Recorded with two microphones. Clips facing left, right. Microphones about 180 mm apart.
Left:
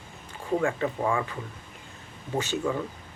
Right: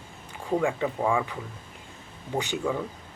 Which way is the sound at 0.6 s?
15° right (ahead or behind).